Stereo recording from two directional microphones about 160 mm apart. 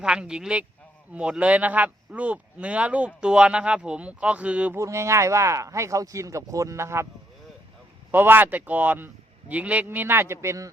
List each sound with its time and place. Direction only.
0.0 s speech: 5° right (ahead or behind)
8.1 s speech: 15° right (ahead or behind)